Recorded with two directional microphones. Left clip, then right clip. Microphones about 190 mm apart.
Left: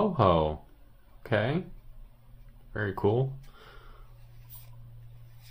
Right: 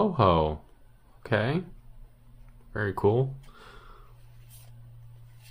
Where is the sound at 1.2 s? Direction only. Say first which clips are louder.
Right 1 dB; 20° right (ahead or behind).